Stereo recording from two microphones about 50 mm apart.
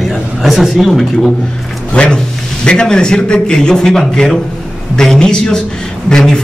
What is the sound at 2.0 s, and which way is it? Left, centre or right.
Speech, left.